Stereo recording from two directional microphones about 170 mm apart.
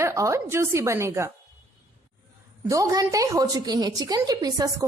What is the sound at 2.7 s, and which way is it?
A woman's voice, 20° right (ahead or behind).